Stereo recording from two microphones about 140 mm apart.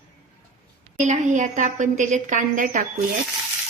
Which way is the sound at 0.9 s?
60° right (ahead or behind).